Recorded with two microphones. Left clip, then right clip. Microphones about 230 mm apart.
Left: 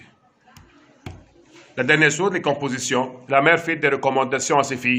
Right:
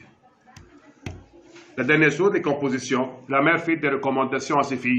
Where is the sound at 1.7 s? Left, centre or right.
Left.